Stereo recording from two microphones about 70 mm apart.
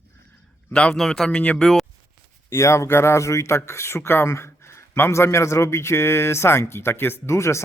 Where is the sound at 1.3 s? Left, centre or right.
Centre.